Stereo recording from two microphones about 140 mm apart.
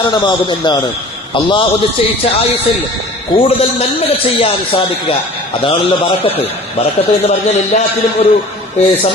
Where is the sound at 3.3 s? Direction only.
45° left (ahead or behind).